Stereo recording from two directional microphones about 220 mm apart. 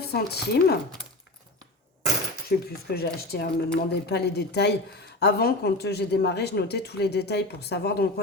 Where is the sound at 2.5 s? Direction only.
45° left (ahead or behind).